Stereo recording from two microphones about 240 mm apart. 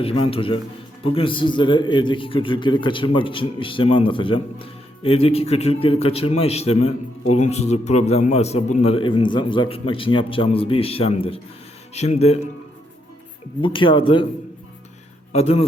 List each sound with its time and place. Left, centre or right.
0.0 s a man's voice: left
13.6 s a man's voice: left
15.3 s a man's voice: left